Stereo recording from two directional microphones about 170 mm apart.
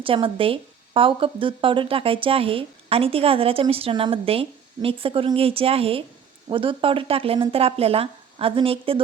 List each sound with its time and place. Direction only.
0.0 s a woman's voice: 30° right (ahead or behind)